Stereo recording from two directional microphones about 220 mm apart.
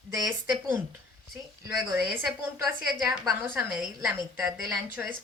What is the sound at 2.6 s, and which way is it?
A woman's voice, centre (ahead or behind).